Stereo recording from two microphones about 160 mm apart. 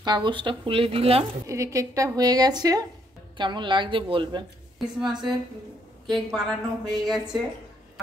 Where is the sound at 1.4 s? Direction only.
20° right (ahead or behind).